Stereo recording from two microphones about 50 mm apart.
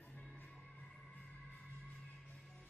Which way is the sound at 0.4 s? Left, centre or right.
Left.